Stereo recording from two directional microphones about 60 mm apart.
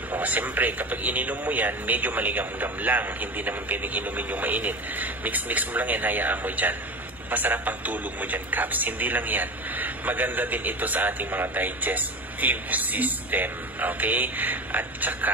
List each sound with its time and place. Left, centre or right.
0.1 s speech: right